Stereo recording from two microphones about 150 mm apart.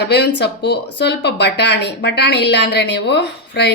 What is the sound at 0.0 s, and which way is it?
A woman's voice, 90° left.